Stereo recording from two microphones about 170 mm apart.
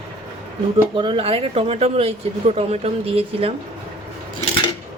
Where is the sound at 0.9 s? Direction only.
30° right (ahead or behind).